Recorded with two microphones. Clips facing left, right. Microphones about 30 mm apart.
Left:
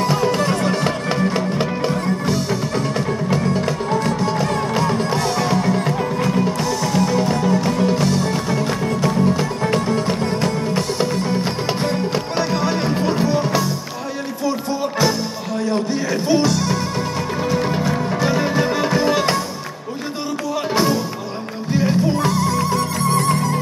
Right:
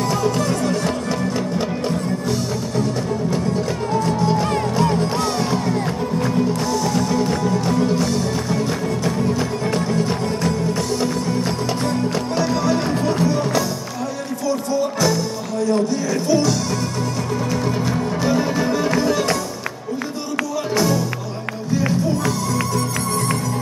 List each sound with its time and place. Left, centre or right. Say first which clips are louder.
0.0 s music: left 2 dB; left
4.7 s music: even; left
8.3 s music: left 1 dB; left
20.7 s music: even; left